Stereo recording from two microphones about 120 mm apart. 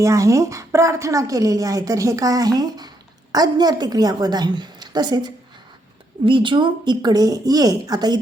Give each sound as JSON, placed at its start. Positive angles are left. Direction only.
{"t": 0.0, "sound": "a woman's voice", "side_deg": -25}